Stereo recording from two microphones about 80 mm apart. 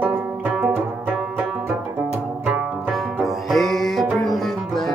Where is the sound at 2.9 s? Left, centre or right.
Centre.